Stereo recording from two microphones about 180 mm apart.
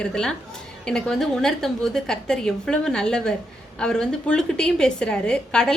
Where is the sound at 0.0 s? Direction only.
5° left (ahead or behind).